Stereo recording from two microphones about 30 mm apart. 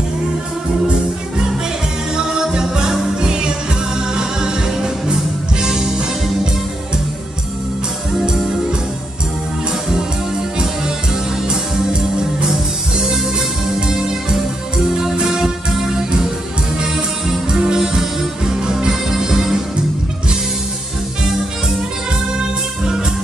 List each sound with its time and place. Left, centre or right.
2.1 s music: right
11.4 s music: right
13.7 s music: right
17.5 s music: right
22.4 s music: right